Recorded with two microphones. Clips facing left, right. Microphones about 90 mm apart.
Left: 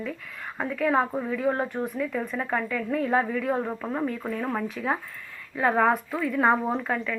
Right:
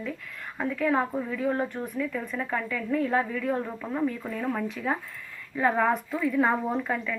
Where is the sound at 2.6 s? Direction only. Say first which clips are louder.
Left 1 dB; 5° left (ahead or behind).